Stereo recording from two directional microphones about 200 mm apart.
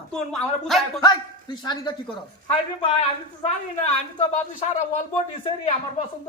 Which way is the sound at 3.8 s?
30° left (ahead or behind).